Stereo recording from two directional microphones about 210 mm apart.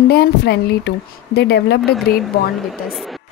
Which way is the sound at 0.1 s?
50° left (ahead or behind).